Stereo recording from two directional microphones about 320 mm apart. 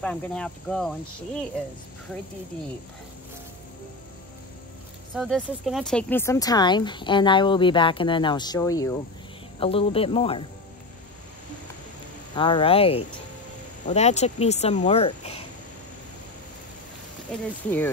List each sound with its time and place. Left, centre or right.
0.0 s cricket: centre
5.1 s speech: centre
12.4 s speech: centre
17.3 s cricket: centre